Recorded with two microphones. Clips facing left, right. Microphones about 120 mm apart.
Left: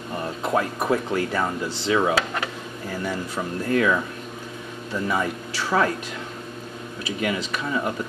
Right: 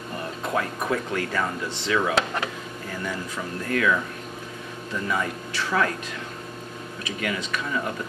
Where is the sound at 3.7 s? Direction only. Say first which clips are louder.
Left 2 dB; 25° left (ahead or behind).